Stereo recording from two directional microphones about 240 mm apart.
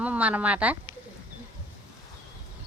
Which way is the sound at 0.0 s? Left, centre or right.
Centre.